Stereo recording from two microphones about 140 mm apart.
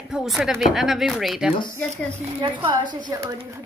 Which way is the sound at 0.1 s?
5° right (ahead or behind).